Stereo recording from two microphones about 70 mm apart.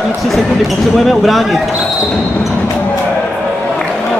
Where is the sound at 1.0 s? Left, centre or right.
Centre.